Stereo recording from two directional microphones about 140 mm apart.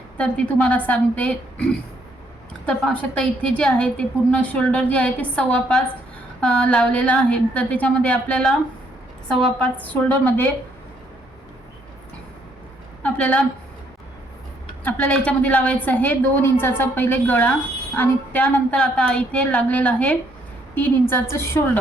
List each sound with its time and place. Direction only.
0.2 s a woman's voice: 10° left (ahead or behind)
13.0 s a sound: 10° left (ahead or behind)
14.8 s a woman's voice: 10° left (ahead or behind)